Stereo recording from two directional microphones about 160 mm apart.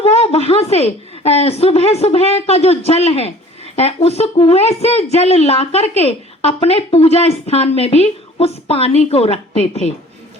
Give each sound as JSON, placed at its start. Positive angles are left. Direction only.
{"t": 0.0, "sound": "a woman's voice", "side_deg": 40}